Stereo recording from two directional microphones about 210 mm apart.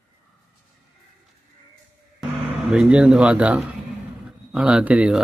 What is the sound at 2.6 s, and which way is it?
Speech, 5° right (ahead or behind).